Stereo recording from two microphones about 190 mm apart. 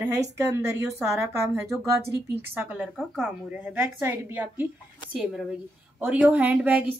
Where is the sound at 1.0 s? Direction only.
15° right (ahead or behind).